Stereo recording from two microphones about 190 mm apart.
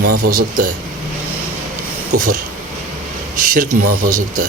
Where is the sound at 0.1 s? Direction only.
50° right (ahead or behind).